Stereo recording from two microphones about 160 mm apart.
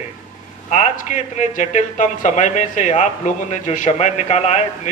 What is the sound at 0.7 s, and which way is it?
A man's voice, 45° left (ahead or behind).